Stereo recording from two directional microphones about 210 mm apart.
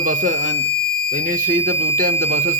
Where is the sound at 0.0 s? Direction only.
40° right (ahead or behind).